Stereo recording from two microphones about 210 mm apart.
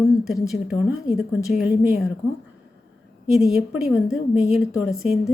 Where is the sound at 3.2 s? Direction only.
Centre (ahead or behind).